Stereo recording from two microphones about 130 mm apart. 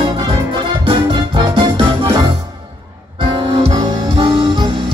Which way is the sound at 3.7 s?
30° right (ahead or behind).